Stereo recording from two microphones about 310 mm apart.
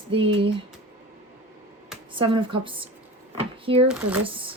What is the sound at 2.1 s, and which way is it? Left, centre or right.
Speech, centre.